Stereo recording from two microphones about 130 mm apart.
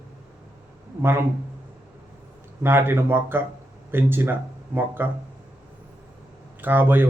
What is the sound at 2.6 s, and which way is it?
A man's voice, 15° right (ahead or behind).